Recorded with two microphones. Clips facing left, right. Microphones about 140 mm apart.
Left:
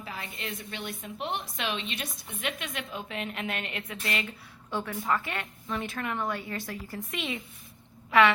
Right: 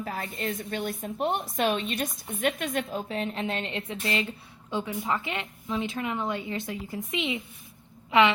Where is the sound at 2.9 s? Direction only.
35° right (ahead or behind).